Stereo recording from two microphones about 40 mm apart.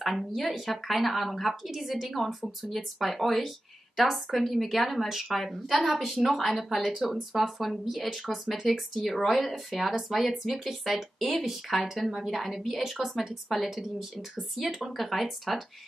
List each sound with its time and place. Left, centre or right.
0.0 s speech: centre